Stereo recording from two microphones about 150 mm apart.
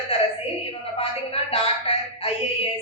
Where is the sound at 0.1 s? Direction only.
40° left (ahead or behind).